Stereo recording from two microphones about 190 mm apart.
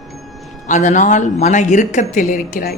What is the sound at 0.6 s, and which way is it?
A woman's voice, 40° left (ahead or behind).